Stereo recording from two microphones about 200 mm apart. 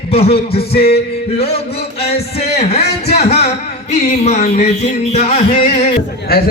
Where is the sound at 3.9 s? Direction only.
35° left (ahead or behind).